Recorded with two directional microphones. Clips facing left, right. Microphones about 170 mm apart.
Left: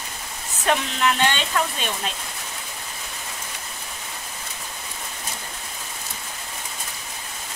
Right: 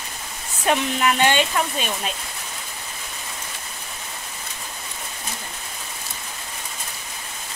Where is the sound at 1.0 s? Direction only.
15° right (ahead or behind).